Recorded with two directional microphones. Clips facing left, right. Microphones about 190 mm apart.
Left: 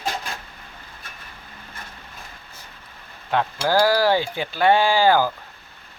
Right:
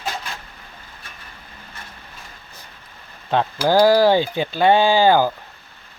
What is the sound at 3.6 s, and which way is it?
Speech, 20° right (ahead or behind).